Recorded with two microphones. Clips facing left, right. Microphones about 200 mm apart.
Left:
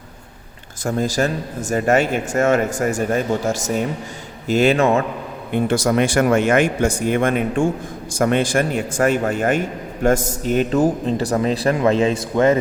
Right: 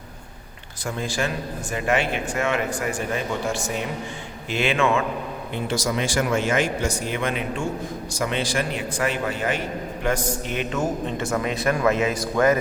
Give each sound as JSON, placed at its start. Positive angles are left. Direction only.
{"t": 0.9, "sound": "a man's voice", "side_deg": 40}
{"t": 5.5, "sound": "a man's voice", "side_deg": 55}